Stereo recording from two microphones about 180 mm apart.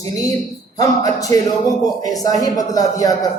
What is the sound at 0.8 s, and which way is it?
Speech, 20° left (ahead or behind).